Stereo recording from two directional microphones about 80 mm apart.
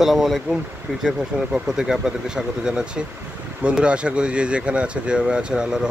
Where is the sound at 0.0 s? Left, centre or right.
Centre.